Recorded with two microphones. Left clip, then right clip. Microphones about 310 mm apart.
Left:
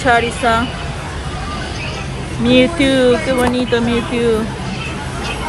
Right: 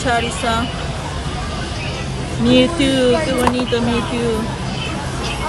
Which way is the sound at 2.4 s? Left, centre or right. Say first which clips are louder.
Left 2 dB; right.